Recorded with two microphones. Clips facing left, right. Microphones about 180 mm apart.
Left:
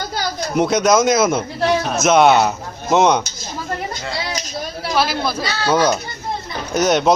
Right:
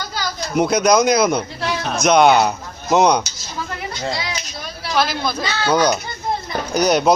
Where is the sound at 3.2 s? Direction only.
45° left (ahead or behind).